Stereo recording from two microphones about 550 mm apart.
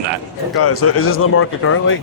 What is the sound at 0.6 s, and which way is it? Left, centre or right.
Speech, left.